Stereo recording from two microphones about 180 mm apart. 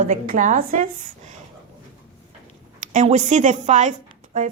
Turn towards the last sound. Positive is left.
turn(degrees=-45)  # may be behind; listen again after turning